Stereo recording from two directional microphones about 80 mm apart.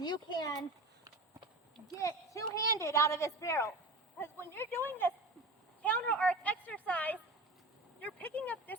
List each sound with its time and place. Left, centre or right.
0.0 s speech: left
2.0 s a woman's voice: left